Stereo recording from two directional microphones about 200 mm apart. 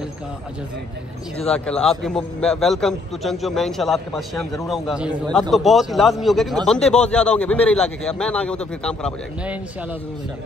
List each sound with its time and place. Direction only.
1.4 s a man's voice: 5° left (ahead or behind)